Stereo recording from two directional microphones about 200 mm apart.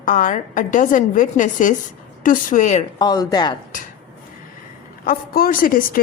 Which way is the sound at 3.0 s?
20° left (ahead or behind).